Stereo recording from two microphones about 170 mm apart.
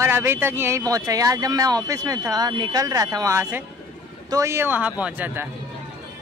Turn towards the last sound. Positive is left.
turn(degrees=-10)  # may be behind; listen again after turning